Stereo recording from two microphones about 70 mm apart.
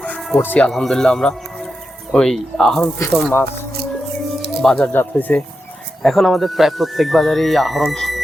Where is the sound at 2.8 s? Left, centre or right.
Left.